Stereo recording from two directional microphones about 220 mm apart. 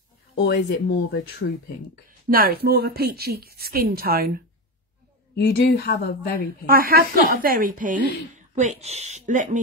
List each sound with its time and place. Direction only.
0.4 s a woman's voice: 50° left (ahead or behind)
2.0 s speech: 40° right (ahead or behind)
5.3 s a woman's voice: 45° left (ahead or behind)
6.6 s a woman's voice: 40° right (ahead or behind)